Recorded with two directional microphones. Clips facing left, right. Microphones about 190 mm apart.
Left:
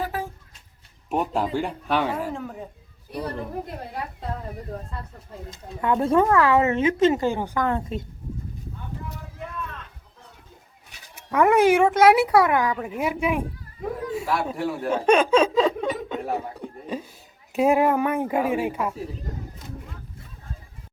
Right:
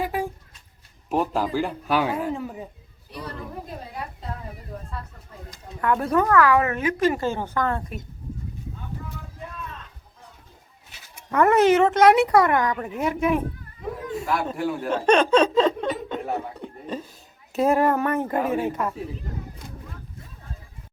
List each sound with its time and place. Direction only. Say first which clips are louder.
0.0 s a sound: right 3 dB; 15° right (ahead or behind)
1.1 s a man's voice: right 1 dB; centre (ahead or behind)
5.5 s a woman's voice: even; 25° left (ahead or behind)
11.1 s speech: even; 10° left (ahead or behind)
14.1 s snicker: right 1 dB; 5° left (ahead or behind)
17.5 s speech: left 1 dB; 15° left (ahead or behind)